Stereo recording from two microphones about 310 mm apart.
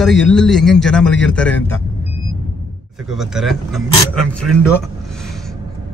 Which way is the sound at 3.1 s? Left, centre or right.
Centre.